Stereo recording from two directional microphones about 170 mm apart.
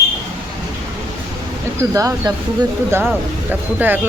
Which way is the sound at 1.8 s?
20° right (ahead or behind).